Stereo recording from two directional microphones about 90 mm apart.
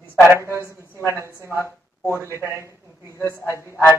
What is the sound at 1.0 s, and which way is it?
A woman's voice, 30° right (ahead or behind).